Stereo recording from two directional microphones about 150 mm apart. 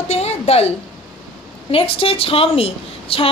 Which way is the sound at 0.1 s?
45° left (ahead or behind).